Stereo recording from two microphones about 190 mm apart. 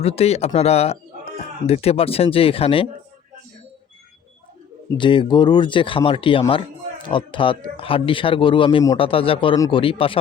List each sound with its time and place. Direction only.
0.0 s speech: 35° left (ahead or behind)
4.9 s speech: 25° left (ahead or behind)